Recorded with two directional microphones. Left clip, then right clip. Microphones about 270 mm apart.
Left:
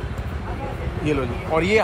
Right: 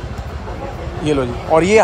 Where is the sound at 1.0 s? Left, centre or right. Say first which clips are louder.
Right 6 dB; centre.